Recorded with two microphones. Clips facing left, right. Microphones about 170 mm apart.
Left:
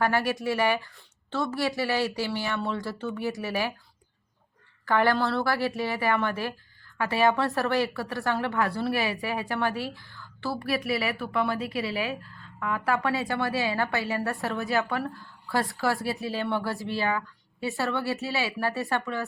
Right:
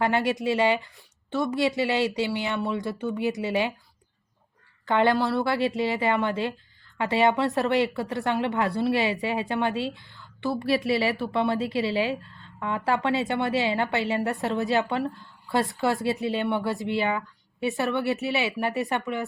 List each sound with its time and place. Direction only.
0.0 s a woman's voice: 20° right (ahead or behind)
4.9 s a woman's voice: 20° right (ahead or behind)